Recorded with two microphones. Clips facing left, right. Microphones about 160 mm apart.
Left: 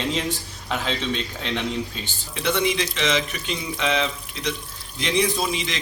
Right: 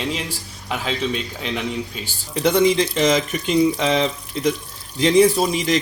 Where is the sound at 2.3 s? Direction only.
40° right (ahead or behind).